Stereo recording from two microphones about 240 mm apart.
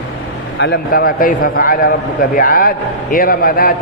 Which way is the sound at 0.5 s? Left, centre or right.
Left.